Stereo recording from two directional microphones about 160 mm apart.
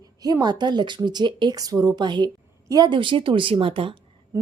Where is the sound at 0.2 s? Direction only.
25° right (ahead or behind).